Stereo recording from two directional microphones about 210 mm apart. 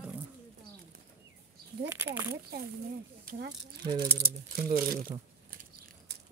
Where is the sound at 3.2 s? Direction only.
50° right (ahead or behind).